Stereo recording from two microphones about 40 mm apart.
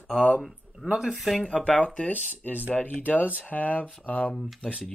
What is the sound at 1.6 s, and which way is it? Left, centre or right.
Speech, left.